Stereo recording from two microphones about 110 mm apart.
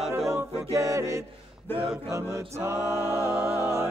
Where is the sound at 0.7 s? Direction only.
30° right (ahead or behind).